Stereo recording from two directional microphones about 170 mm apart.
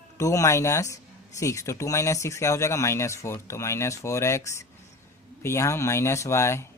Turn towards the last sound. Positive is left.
turn(degrees=15)  # may be behind; listen again after turning